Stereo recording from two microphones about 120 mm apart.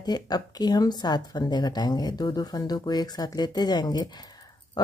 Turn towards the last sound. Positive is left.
turn(degrees=35)  # may be behind; listen again after turning